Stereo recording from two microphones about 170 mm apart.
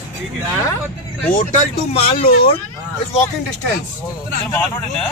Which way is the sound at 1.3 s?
55° left (ahead or behind).